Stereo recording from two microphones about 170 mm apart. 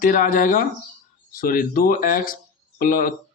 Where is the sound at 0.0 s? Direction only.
55° left (ahead or behind).